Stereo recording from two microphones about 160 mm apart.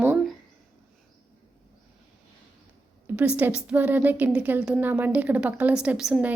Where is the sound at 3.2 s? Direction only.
10° right (ahead or behind).